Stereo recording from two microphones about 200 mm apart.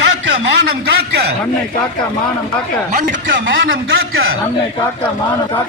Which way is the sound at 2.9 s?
40° right (ahead or behind).